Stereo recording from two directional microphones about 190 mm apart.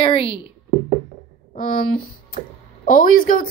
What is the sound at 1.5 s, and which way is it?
Speech, 45° left (ahead or behind).